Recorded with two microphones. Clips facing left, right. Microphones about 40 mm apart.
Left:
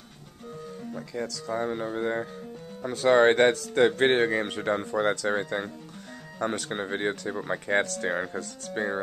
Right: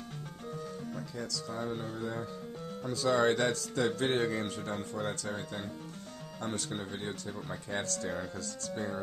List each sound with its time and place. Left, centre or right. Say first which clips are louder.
1.1 s speech: left 10 dB; left
1.5 s speech: left 10 dB; left
2.8 s speech: left 8 dB; left
8.0 s speech: left 8 dB; left